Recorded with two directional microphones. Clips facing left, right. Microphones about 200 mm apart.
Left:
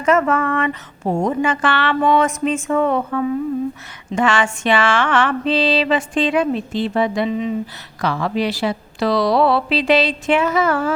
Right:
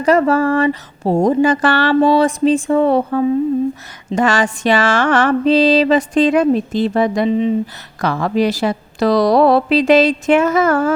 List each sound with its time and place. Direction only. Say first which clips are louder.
0.0 s mantra: right 4 dB; 35° right (ahead or behind)
8.0 s a woman's voice: right 4 dB; 45° right (ahead or behind)